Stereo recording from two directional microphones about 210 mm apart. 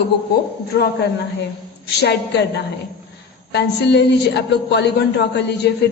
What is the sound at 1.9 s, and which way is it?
Speech, 55° left (ahead or behind).